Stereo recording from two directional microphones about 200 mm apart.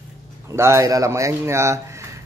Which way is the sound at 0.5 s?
15° right (ahead or behind).